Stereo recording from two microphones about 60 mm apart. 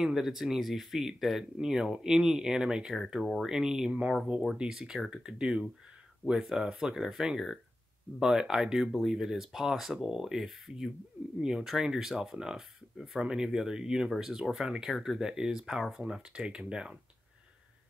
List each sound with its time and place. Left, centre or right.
0.0 s speech: centre